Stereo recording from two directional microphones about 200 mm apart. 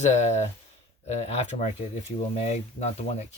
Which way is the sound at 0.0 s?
35° left (ahead or behind).